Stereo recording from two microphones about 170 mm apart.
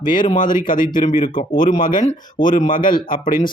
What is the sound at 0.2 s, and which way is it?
Speech, 50° left (ahead or behind).